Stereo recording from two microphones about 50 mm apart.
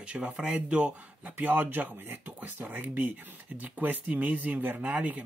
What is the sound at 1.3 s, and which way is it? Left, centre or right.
Speech, right.